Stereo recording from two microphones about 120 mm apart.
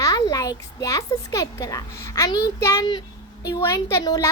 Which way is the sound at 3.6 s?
25° left (ahead or behind).